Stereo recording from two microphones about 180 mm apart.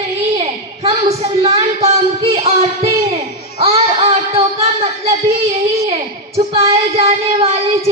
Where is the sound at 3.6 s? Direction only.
35° right (ahead or behind).